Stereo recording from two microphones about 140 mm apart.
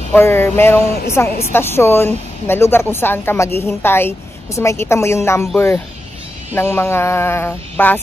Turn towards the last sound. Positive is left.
turn(degrees=15)  # may be behind; listen again after turning